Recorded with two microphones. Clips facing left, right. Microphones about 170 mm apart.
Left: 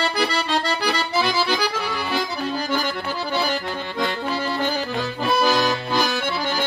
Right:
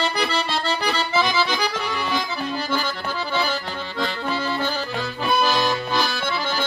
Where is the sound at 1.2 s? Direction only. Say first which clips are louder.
Left 2 dB; 10° left (ahead or behind).